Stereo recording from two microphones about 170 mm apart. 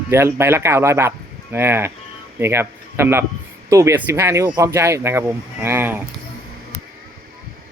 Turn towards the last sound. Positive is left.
turn(degrees=-10)  # may be behind; listen again after turning